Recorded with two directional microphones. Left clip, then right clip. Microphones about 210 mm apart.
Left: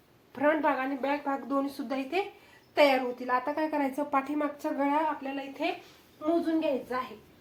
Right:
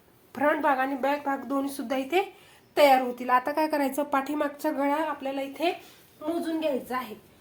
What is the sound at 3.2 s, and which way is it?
A woman's voice, 45° right (ahead or behind).